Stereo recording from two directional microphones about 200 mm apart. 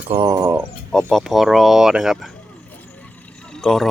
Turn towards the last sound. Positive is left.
turn(degrees=0)  # may be behind; listen again after turning